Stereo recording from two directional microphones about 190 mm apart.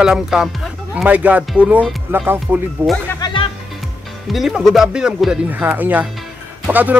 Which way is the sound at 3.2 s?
25° left (ahead or behind).